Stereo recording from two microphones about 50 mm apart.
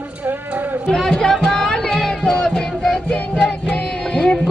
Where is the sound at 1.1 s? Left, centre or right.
Centre.